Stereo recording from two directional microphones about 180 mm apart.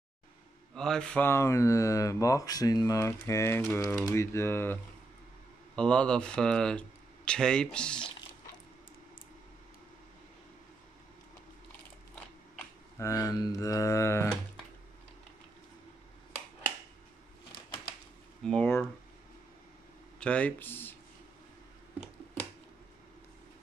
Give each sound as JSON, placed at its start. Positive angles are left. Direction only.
{"t": 0.7, "sound": "speech", "side_deg": 5}
{"t": 5.8, "sound": "speech", "side_deg": 5}
{"t": 13.0, "sound": "speech", "side_deg": 20}
{"t": 18.4, "sound": "speech", "side_deg": 5}
{"t": 20.2, "sound": "speech", "side_deg": 5}